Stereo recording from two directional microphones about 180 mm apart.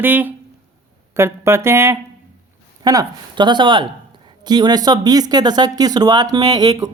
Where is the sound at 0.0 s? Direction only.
10° right (ahead or behind).